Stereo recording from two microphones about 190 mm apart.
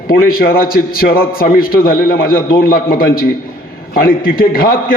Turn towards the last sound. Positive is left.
turn(degrees=50)  # may be behind; listen again after turning